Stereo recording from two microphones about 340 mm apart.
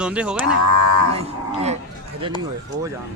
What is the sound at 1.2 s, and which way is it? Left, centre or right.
Speech, centre.